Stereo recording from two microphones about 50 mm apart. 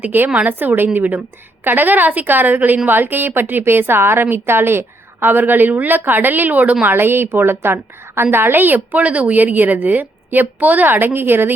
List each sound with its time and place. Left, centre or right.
0.0 s a woman's voice: right
6.8 s a woman's voice: right